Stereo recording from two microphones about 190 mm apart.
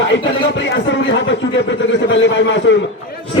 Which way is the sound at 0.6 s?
70° left (ahead or behind).